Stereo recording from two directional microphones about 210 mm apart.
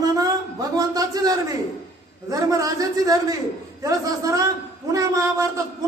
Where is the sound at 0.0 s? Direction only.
15° right (ahead or behind).